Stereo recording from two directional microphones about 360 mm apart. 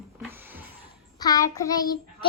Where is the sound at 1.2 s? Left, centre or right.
Centre.